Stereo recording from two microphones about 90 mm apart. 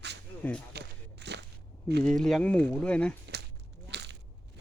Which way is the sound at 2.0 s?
5° left (ahead or behind).